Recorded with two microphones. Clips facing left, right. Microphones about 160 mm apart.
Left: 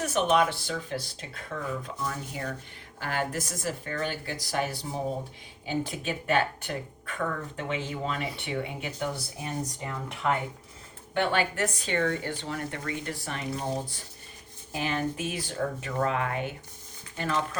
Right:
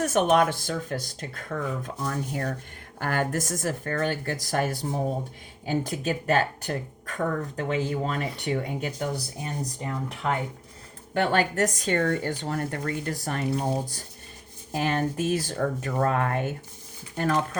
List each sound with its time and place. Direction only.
0.0 s speech: 45° right (ahead or behind)